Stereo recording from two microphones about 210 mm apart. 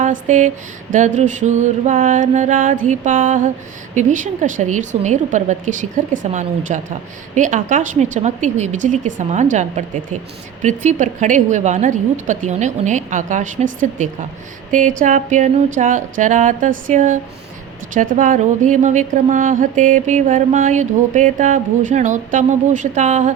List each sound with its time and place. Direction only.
0.0 s a sound: 35° right (ahead or behind)
0.9 s a woman's voice: 35° right (ahead or behind)
14.7 s a woman's voice: 40° right (ahead or behind)